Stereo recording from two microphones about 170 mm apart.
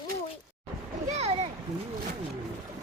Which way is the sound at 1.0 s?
40° right (ahead or behind).